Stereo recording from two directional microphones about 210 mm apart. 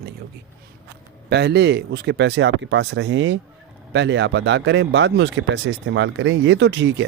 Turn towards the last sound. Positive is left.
turn(degrees=-55)  # may be behind; listen again after turning